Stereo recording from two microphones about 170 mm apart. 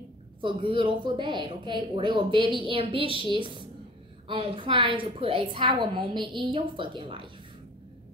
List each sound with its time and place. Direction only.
0.4 s a woman's voice: 30° right (ahead or behind)